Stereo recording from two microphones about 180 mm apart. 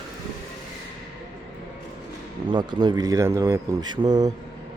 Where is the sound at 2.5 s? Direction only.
25° right (ahead or behind).